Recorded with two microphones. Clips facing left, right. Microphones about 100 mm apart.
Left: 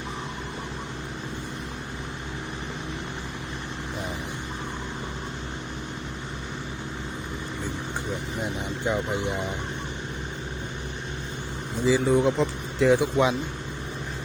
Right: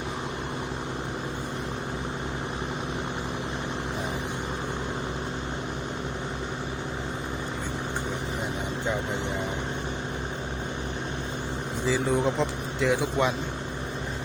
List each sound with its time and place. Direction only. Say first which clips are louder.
11.9 s speech: left 4 dB; centre (ahead or behind)
13.0 s speech: left 3 dB; 20° left (ahead or behind)